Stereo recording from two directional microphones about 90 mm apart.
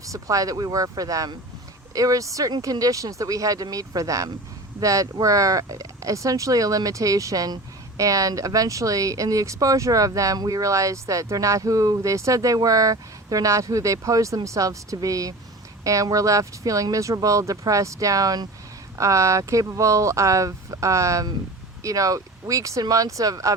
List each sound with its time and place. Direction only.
0.0 s speech: 40° right (ahead or behind)